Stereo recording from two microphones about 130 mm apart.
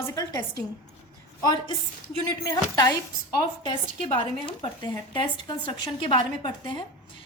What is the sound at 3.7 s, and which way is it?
A woman's voice, 45° left (ahead or behind).